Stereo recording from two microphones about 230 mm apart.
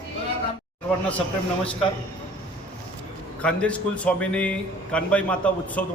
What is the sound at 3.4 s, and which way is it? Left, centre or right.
A man's voice, centre.